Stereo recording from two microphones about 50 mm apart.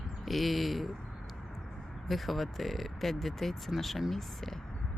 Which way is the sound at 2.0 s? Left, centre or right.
Centre.